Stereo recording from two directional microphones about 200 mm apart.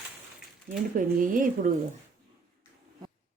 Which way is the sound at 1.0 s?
40° right (ahead or behind).